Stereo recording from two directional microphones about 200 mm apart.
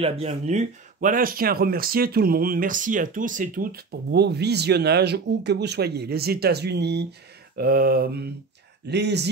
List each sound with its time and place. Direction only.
0.0 s speech: 35° right (ahead or behind); by 9.3 s 55° right (ahead or behind)